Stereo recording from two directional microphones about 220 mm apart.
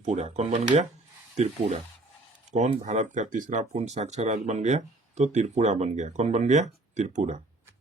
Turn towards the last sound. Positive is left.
turn(degrees=-30)  # may be behind; listen again after turning